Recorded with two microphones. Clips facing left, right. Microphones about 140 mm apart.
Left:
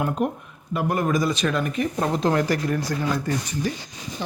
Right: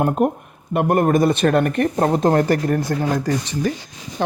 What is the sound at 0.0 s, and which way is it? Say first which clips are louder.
Speech: right 6 dB; 45° right (ahead or behind).